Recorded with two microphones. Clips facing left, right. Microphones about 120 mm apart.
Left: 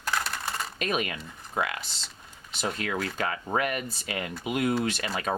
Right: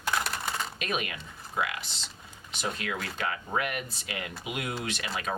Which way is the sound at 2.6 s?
40° left (ahead or behind).